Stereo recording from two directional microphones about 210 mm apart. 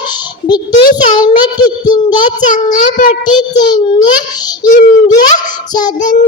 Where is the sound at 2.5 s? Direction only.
35° left (ahead or behind).